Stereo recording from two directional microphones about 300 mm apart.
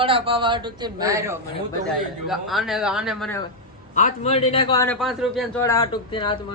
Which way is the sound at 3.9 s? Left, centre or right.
Left.